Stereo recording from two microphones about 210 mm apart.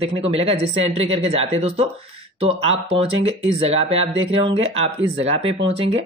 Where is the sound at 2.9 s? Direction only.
30° right (ahead or behind).